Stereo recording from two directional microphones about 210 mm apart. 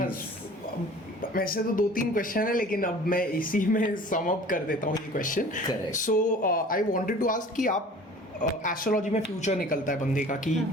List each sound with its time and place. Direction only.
1.3 s speech: 45° left (ahead or behind)